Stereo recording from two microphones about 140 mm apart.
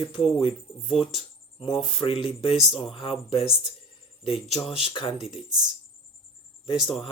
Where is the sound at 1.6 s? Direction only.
40° left (ahead or behind).